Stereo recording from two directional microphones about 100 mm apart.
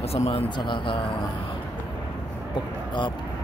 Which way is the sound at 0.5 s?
50° left (ahead or behind).